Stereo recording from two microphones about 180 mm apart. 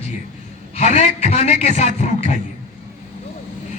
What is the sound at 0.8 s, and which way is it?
A man's voice, 40° left (ahead or behind).